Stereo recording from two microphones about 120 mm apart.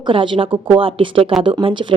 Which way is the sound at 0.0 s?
45° right (ahead or behind).